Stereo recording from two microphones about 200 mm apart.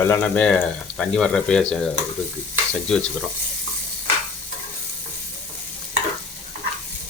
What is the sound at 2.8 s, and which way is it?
Speech, 5° left (ahead or behind).